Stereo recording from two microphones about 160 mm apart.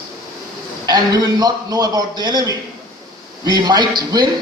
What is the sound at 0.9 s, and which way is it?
A man's voice, 25° right (ahead or behind).